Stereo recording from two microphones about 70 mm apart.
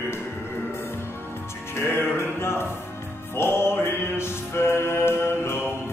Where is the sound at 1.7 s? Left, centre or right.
Left.